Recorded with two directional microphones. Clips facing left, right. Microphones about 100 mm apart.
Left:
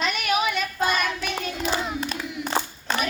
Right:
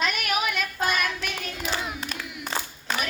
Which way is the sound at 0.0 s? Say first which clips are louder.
Left 3 dB; centre (ahead or behind).